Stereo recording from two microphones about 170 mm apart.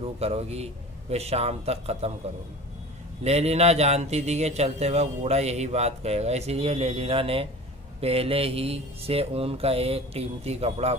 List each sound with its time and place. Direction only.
0.0 s a man's voice: 35° right (ahead or behind)
3.3 s a man's voice: 40° right (ahead or behind)